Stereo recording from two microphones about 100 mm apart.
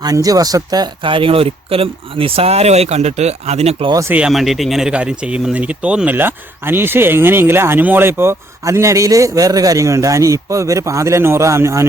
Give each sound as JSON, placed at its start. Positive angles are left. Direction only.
{"t": 0.0, "sound": "speech", "side_deg": -35}
{"t": 1.0, "sound": "speech", "side_deg": -60}
{"t": 4.3, "sound": "speech", "side_deg": 0}
{"t": 6.1, "sound": "speech", "side_deg": -20}